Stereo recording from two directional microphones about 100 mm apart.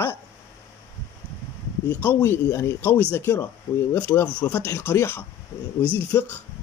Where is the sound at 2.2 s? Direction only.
30° left (ahead or behind).